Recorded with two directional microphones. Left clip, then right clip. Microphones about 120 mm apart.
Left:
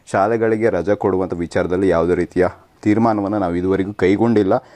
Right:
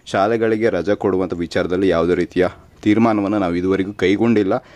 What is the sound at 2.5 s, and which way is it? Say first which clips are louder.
Speech: even; 40° right (ahead or behind).